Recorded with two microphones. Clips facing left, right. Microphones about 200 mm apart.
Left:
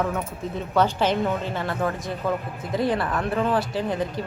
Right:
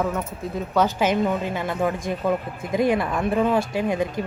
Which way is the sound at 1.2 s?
10° right (ahead or behind).